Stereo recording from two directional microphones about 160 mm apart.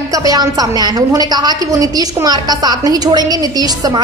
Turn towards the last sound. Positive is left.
turn(degrees=-25)  # may be behind; listen again after turning